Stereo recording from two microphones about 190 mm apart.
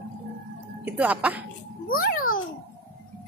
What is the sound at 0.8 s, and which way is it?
Speech, 10° right (ahead or behind).